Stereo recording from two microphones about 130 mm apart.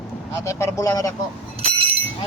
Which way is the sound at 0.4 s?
20° left (ahead or behind).